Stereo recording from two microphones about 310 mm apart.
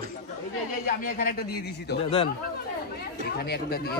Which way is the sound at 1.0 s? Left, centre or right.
Left.